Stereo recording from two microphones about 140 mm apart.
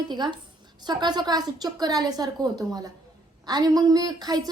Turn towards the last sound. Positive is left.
turn(degrees=-30)  # may be behind; listen again after turning